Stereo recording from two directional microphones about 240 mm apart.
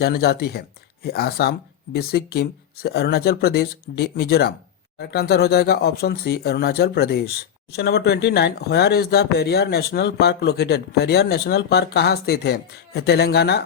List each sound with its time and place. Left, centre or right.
0.0 s speech: left